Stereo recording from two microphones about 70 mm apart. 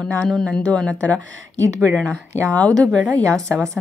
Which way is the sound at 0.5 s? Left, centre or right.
Centre.